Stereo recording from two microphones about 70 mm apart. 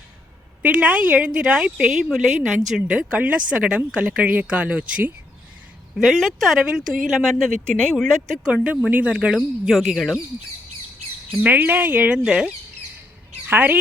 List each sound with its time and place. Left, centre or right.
0.6 s a woman's voice: centre
6.0 s a woman's voice: centre
6.6 s a woman's voice: centre
8.4 s speech: centre
11.3 s speech: right
13.5 s speech: right